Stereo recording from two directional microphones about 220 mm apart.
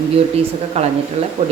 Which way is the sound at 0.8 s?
30° right (ahead or behind).